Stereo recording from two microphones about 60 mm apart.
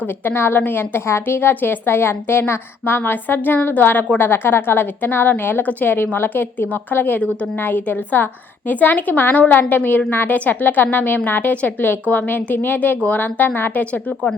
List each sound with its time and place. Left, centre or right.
0.0 s a woman's voice: left
10.3 s a woman's voice: left